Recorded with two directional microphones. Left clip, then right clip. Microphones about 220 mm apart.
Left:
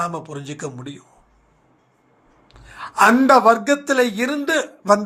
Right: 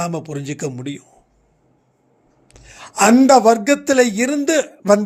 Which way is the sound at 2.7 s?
55° right (ahead or behind).